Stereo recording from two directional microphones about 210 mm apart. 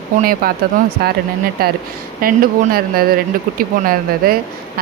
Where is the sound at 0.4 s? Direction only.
45° right (ahead or behind).